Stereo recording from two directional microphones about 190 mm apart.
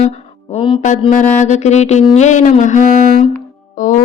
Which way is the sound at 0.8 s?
40° left (ahead or behind).